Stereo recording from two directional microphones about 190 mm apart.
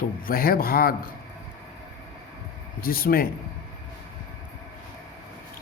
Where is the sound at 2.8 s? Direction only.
50° left (ahead or behind).